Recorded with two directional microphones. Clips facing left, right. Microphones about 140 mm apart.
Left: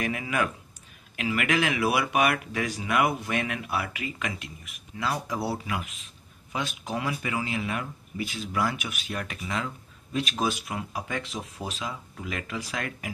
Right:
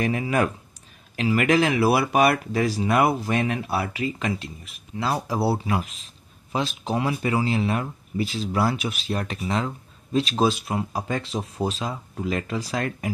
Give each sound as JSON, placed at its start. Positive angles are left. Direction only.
{"t": 0.0, "sound": "speech", "side_deg": -30}